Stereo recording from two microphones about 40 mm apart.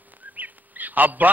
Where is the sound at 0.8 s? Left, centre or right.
Right.